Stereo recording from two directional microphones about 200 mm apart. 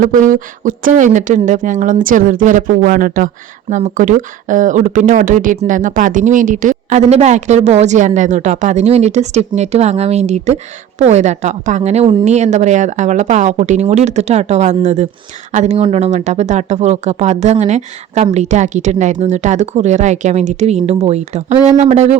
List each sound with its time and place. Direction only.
0.0 s speech: 40° right (ahead or behind)